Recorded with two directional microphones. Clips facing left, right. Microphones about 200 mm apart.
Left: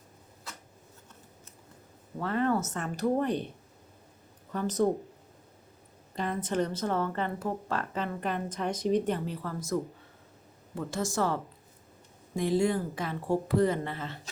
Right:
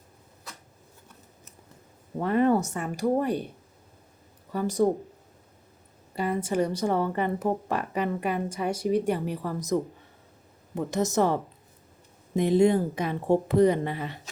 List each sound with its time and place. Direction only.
2.2 s a woman's voice: 15° right (ahead or behind)
4.5 s a woman's voice: 10° right (ahead or behind)
6.1 s a woman's voice: 10° right (ahead or behind)
10.8 s a woman's voice: 20° right (ahead or behind)
12.4 s a woman's voice: 20° right (ahead or behind)